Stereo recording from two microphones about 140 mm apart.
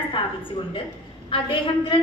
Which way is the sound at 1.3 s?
40° left (ahead or behind).